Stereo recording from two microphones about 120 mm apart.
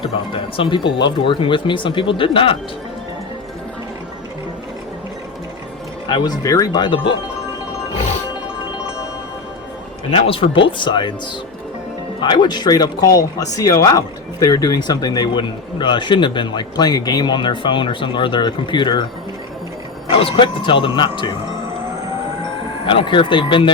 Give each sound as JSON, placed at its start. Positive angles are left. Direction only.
{"t": 0.0, "sound": "speech", "side_deg": 45}
{"t": 6.1, "sound": "speech", "side_deg": 40}
{"t": 6.4, "sound": "speech", "side_deg": 30}
{"t": 10.1, "sound": "speech", "side_deg": 50}
{"t": 12.2, "sound": "speech", "side_deg": 40}
{"t": 20.1, "sound": "speech", "side_deg": 50}
{"t": 22.9, "sound": "speech", "side_deg": 45}